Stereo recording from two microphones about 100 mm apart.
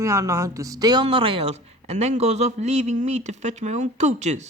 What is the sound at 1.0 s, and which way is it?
A man's voice, 60° right (ahead or behind).